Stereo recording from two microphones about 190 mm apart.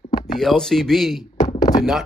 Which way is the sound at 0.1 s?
25° left (ahead or behind).